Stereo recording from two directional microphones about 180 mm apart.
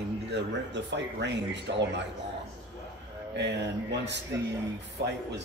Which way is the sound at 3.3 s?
75° right (ahead or behind).